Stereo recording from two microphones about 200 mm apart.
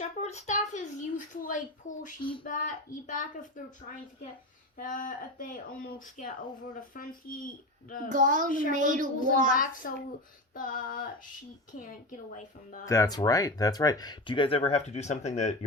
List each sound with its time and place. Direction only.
0.0 s speech: 35° left (ahead or behind)
8.1 s a child's voice: 40° right (ahead or behind)
9.8 s speech: 50° left (ahead or behind)
12.8 s speech: 15° left (ahead or behind); by 15.5 s 35° left (ahead or behind)